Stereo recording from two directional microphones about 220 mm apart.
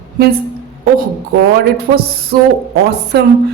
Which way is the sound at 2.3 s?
45° right (ahead or behind).